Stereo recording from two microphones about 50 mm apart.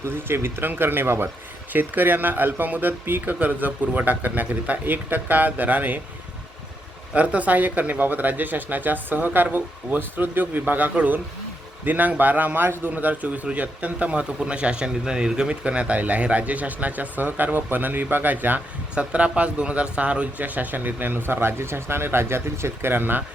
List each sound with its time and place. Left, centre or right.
0.0 s speech: right
1.7 s speech: right
7.1 s speech: right
12.9 s speech: right
18.9 s speech: right
20.4 s speech: right